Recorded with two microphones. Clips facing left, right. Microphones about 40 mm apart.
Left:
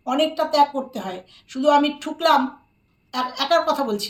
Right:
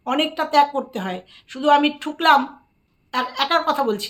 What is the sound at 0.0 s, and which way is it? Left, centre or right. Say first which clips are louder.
Speech: left 1 dB; right.